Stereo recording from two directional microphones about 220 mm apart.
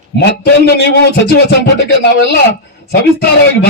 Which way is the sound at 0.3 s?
50° left (ahead or behind).